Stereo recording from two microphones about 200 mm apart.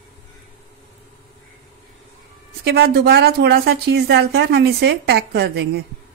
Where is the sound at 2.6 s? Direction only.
50° right (ahead or behind).